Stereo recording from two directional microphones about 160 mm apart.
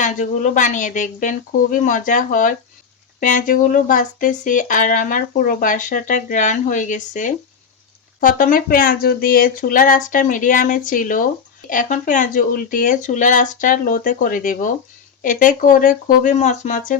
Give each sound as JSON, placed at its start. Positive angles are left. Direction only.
{"t": 0.0, "sound": "speech", "side_deg": 50}